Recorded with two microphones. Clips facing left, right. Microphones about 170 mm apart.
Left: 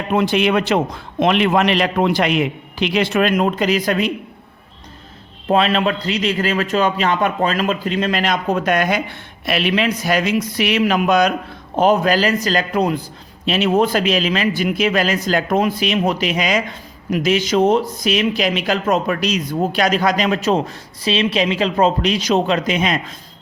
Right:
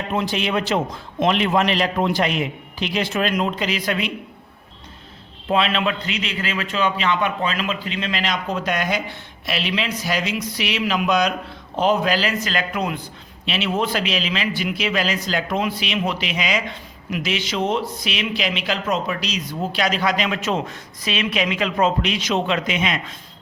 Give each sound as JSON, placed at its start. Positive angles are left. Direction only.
{"t": 0.1, "sound": "a man's voice", "side_deg": 65}
{"t": 5.5, "sound": "a man's voice", "side_deg": 40}